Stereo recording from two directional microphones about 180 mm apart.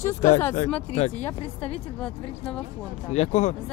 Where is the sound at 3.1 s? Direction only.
40° left (ahead or behind).